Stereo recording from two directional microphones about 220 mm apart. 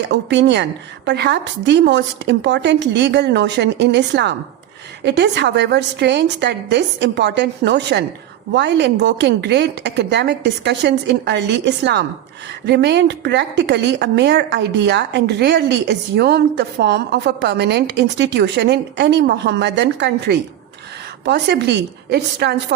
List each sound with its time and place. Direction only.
0.1 s a woman's voice: 55° right (ahead or behind)